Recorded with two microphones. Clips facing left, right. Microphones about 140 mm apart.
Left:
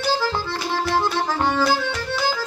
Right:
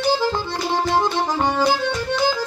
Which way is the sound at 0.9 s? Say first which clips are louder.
Even; 15° right (ahead or behind).